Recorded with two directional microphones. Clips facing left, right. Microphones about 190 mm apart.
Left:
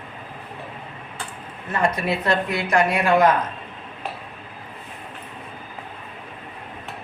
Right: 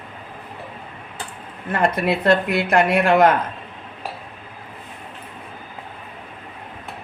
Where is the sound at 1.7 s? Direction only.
60° right (ahead or behind).